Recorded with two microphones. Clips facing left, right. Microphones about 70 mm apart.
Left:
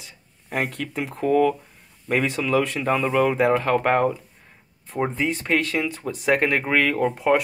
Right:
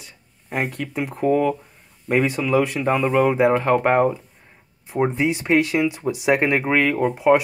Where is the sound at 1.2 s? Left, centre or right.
Centre.